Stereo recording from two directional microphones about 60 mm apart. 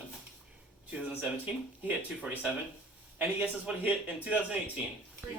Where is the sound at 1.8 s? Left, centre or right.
Right.